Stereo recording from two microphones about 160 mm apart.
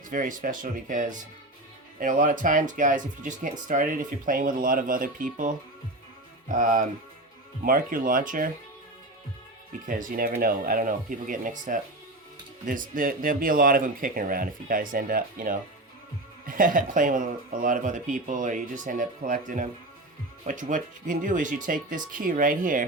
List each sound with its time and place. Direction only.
0.1 s speech: 55° right (ahead or behind)
9.8 s speech: 55° right (ahead or behind)